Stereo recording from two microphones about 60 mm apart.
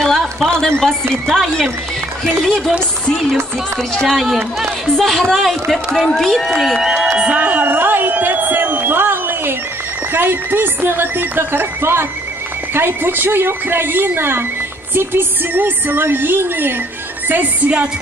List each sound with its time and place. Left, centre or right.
0.0 s a sound: centre
0.7 s a man's voice: centre
3.9 s a man's voice: centre
7.2 s a sound: right
10.1 s speech: right
17.3 s music: right